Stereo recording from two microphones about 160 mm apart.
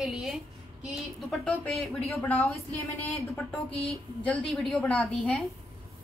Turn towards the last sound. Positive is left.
turn(degrees=5)  # may be behind; listen again after turning